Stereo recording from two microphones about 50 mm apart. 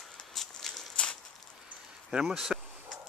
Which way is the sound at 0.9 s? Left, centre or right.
Centre.